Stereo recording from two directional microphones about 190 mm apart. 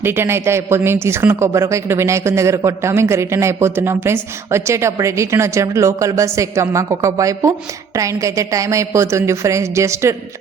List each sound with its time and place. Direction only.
0.0 s a man's voice: 10° right (ahead or behind)